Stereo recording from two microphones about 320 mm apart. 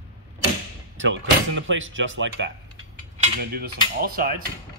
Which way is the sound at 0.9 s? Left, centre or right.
Right.